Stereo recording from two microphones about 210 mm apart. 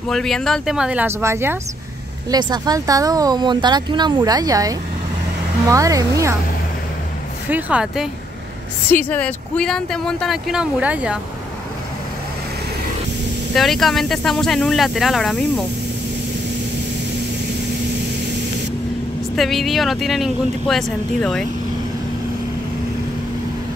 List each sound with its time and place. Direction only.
0.1 s speech: centre (ahead or behind); by 6.3 s 15° right (ahead or behind)
7.4 s speech: 5° right (ahead or behind)
13.6 s speech: centre (ahead or behind)
19.3 s speech: centre (ahead or behind)